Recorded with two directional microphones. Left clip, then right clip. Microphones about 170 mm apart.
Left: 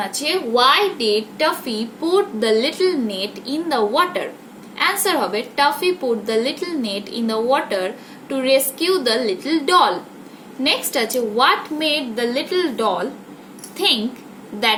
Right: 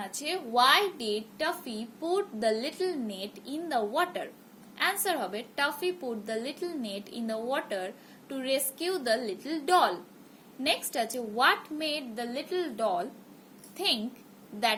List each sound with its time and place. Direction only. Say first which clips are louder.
0.2 s a woman's voice: left 9 dB; 40° right (ahead or behind)